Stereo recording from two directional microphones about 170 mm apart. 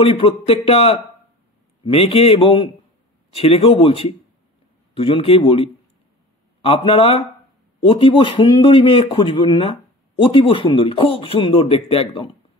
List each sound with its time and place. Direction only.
0.0 s speech: 35° left (ahead or behind)